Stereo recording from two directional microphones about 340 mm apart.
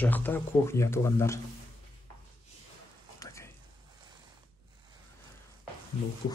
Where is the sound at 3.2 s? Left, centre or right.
Centre.